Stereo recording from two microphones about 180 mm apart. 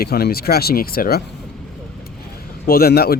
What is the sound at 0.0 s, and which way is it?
Speech, 60° left (ahead or behind).